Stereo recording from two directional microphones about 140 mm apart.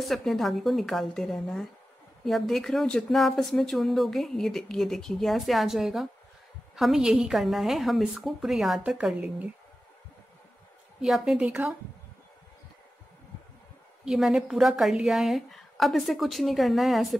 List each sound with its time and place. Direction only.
0.0 s speech: centre (ahead or behind)
11.0 s a woman's voice: centre (ahead or behind)
14.0 s speech: 5° right (ahead or behind)